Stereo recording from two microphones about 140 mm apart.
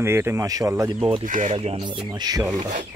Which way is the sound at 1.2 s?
65° right (ahead or behind).